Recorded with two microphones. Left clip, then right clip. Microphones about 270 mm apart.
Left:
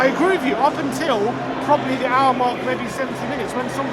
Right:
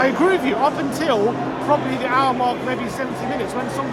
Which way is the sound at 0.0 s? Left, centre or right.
Centre.